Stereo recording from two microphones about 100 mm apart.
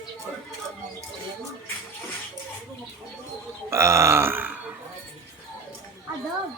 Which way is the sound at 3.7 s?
30° right (ahead or behind).